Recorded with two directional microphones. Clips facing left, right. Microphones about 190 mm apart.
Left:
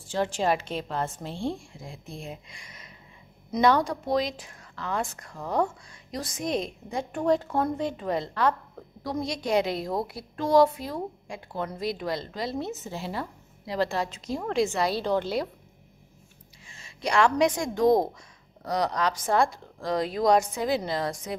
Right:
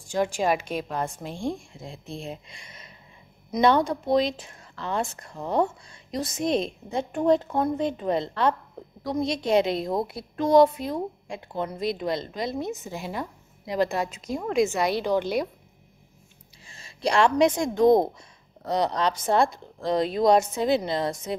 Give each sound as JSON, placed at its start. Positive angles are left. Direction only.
{"t": 0.0, "sound": "a woman's voice", "side_deg": -15}
{"t": 14.2, "sound": "a woman's voice", "side_deg": 0}
{"t": 14.7, "sound": "a woman's voice", "side_deg": -20}
{"t": 16.6, "sound": "a woman's voice", "side_deg": -35}